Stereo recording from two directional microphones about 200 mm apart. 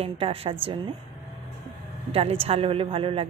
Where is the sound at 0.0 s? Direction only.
30° right (ahead or behind).